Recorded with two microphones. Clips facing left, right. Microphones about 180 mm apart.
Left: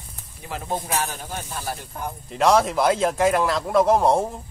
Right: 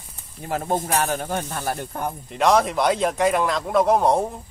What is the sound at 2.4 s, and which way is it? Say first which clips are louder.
Speech: even; centre (ahead or behind).